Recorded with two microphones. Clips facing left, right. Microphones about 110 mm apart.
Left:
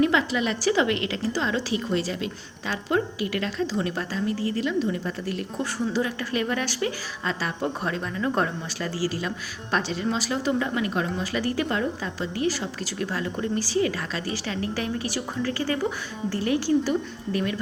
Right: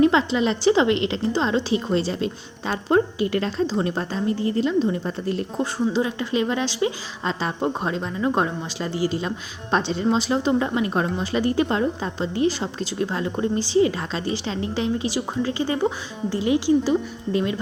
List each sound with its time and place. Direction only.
0.0 s a woman's voice: 30° right (ahead or behind)